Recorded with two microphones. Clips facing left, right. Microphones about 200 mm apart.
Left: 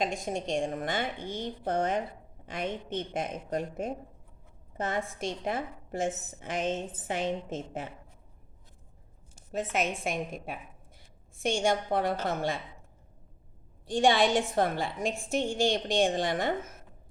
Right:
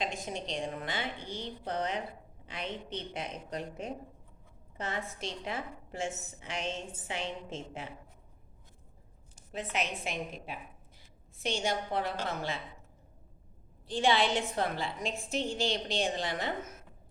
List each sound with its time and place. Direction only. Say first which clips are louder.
0.0 s a woman's voice: left 5 dB; 50° left (ahead or behind)
9.7 s a woman's voice: left 4 dB; 50° left (ahead or behind)
13.9 s a woman's voice: left 4 dB; 45° left (ahead or behind)